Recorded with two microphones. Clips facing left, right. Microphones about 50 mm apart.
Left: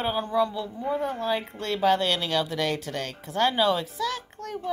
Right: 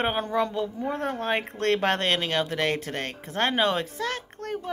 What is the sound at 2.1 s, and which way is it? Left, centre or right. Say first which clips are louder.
Speech: right 1 dB; right.